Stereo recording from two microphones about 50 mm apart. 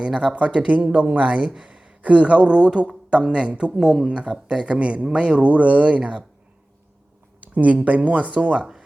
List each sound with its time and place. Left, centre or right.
0.0 s speech: centre
1.5 s a sound: centre
2.0 s speech: right
7.4 s speech: right
8.5 s speech: centre